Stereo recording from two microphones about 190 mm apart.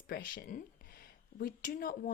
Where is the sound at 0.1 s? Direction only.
50° left (ahead or behind).